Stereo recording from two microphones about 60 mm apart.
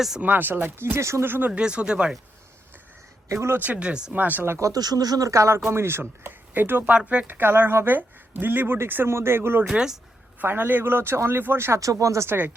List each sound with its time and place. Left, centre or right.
0.2 s speech: right
1.2 s speech: right; by 2.1 s centre
3.2 s speech: right
3.6 s speech: right
4.1 s speech: right
4.6 s speech: right
6.9 s speech: right
7.3 s speech: right
9.6 s speech: centre
10.4 s speech: right
11.8 s speech: right